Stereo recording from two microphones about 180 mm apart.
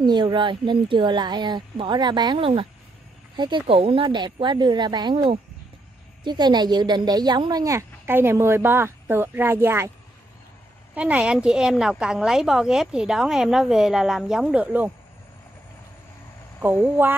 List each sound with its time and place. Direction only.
0.0 s a woman's voice: 25° right (ahead or behind)
11.0 s a woman's voice: 5° right (ahead or behind)
16.6 s a woman's voice: 10° right (ahead or behind)